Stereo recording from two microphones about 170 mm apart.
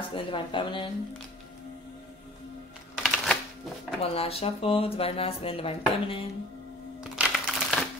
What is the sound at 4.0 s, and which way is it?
Speech, 35° left (ahead or behind).